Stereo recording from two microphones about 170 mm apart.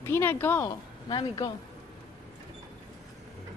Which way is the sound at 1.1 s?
25° left (ahead or behind).